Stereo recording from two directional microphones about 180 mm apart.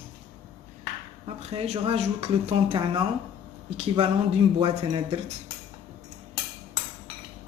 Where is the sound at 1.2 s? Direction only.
35° right (ahead or behind).